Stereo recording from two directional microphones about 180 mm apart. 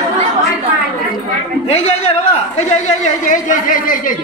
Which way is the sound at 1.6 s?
35° left (ahead or behind).